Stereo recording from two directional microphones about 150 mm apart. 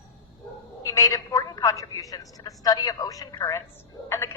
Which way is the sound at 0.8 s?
20° left (ahead or behind).